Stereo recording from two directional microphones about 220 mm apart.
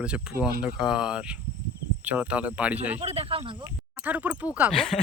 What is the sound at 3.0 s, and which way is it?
Speech, 25° right (ahead or behind).